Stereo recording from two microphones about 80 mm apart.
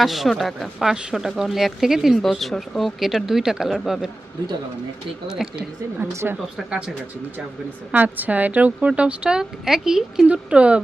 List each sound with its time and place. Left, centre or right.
0.0 s speech: centre
5.3 s a woman's voice: centre
6.0 s speech: right
6.7 s a woman's voice: centre
7.9 s a woman's voice: right